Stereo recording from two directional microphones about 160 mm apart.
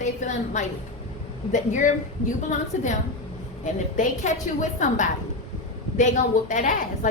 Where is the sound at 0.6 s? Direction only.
45° left (ahead or behind).